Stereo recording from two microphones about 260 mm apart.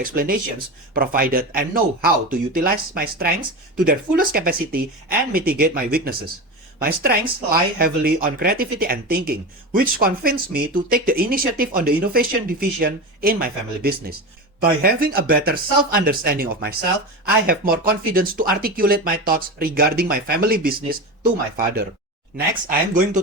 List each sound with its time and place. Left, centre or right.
0.0 s speech: right